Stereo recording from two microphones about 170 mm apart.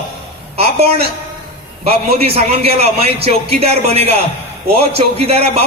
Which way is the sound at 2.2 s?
35° right (ahead or behind).